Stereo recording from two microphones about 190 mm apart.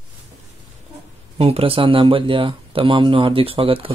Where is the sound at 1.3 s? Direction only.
30° right (ahead or behind).